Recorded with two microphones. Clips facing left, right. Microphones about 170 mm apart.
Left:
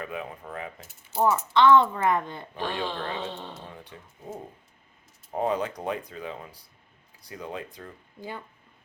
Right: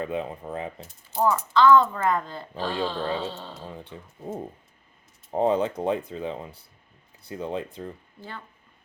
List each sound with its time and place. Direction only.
0.0 s speech: 30° right (ahead or behind)
0.8 s mechanisms: 5° left (ahead or behind)
1.2 s speech: 25° left (ahead or behind)
3.8 s speech: 30° right (ahead or behind)